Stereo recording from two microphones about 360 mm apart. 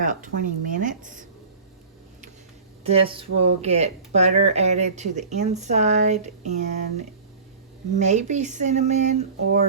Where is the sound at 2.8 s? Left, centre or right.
Centre.